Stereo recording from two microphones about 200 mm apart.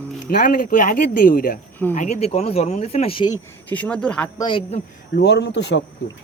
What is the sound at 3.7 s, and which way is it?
Speech, 5° left (ahead or behind).